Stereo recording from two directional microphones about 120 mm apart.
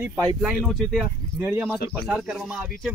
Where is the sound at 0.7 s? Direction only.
Centre (ahead or behind).